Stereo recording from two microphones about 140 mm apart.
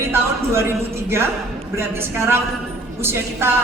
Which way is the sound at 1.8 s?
15° right (ahead or behind).